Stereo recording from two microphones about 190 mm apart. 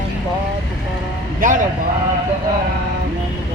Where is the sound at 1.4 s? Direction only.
45° right (ahead or behind).